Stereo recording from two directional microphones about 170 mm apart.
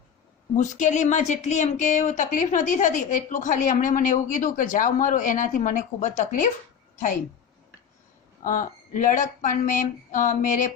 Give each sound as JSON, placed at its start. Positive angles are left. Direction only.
{"t": 0.5, "sound": "speech", "side_deg": 45}
{"t": 8.4, "sound": "speech", "side_deg": 50}